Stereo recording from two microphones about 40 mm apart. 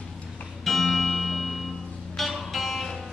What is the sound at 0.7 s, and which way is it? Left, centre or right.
Music, centre.